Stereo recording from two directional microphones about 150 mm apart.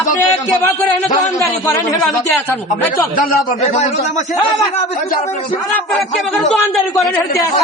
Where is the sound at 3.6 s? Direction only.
50° left (ahead or behind).